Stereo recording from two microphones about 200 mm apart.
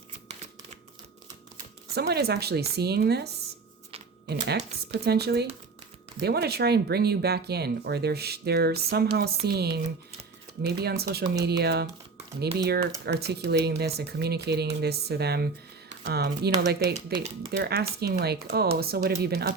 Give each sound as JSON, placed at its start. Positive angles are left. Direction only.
{"t": 2.0, "sound": "speech", "side_deg": -55}